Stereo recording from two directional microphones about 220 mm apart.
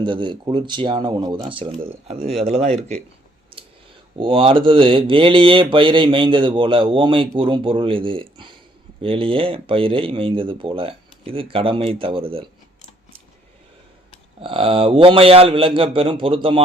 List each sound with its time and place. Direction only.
0.0 s speech: 20° right (ahead or behind)
4.2 s speech: 25° right (ahead or behind)
14.4 s speech: 25° right (ahead or behind)